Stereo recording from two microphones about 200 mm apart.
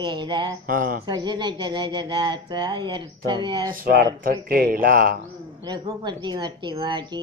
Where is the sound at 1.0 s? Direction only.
20° right (ahead or behind).